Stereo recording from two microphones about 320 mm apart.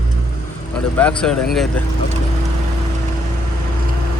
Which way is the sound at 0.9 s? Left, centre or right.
Centre.